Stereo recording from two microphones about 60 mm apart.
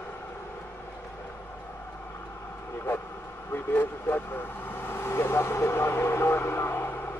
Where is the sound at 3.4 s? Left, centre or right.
Left.